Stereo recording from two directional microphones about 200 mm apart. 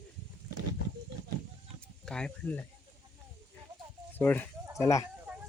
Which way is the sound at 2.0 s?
5° left (ahead or behind).